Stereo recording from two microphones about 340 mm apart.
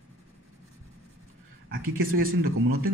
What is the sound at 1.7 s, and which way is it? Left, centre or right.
Speech, right.